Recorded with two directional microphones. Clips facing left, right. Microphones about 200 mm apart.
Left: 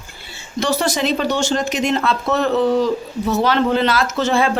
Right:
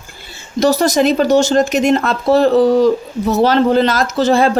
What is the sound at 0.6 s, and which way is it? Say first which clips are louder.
A woman's voice: right 7 dB; 40° right (ahead or behind).